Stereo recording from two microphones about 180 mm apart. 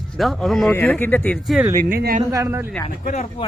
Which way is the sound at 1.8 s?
55° right (ahead or behind).